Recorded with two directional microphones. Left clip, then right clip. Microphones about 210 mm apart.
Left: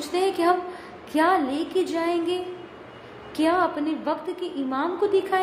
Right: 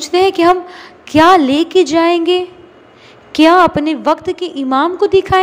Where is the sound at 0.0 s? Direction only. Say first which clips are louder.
Right 12 dB; 35° right (ahead or behind).